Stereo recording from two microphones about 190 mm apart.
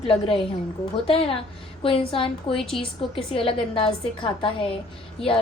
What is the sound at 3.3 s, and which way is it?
Speech, 30° left (ahead or behind).